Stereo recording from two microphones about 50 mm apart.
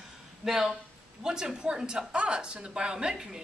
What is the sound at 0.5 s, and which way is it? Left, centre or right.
Speech, centre.